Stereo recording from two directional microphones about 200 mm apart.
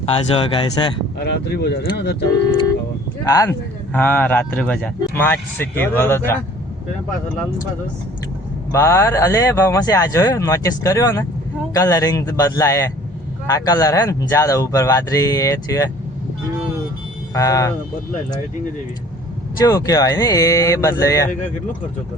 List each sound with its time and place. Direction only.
0.0 s speech: 30° left (ahead or behind)
1.2 s speech: 55° left (ahead or behind)
3.2 s speech: 15° left (ahead or behind)
8.7 s speech: 15° left (ahead or behind)
17.3 s speech: 15° left (ahead or behind)
19.5 s speech: 15° left (ahead or behind)